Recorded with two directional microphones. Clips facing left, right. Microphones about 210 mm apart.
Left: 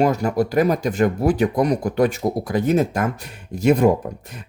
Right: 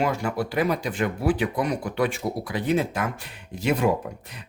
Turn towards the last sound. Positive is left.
turn(degrees=45)  # may be behind; listen again after turning